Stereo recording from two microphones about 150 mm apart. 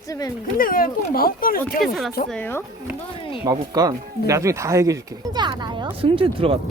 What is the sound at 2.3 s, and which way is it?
Speech, 15° left (ahead or behind).